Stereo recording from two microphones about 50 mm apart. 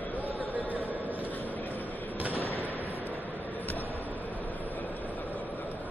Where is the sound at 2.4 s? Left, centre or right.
Left.